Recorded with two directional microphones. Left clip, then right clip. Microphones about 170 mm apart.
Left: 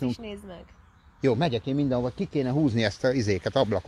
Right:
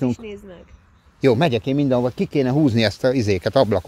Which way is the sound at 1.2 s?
55° right (ahead or behind).